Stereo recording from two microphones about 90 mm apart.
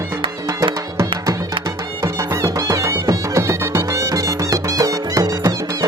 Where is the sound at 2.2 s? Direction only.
35° right (ahead or behind).